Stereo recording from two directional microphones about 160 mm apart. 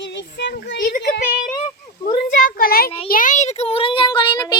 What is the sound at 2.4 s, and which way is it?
Speech, 60° left (ahead or behind).